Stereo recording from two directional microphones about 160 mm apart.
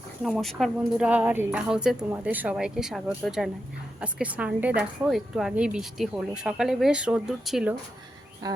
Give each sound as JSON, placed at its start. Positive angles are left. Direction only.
{"t": 0.2, "sound": "speech", "side_deg": 0}
{"t": 8.4, "sound": "speech", "side_deg": -25}